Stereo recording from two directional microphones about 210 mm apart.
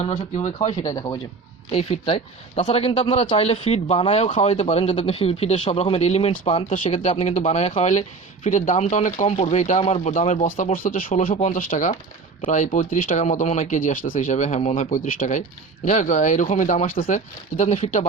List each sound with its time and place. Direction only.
0.0 s speech: 30° left (ahead or behind)
0.8 s speech: 20° left (ahead or behind)
10.8 s speech: 40° left (ahead or behind)